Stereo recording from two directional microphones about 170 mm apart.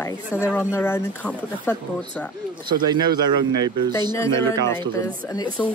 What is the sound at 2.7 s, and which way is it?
Speech, 25° right (ahead or behind).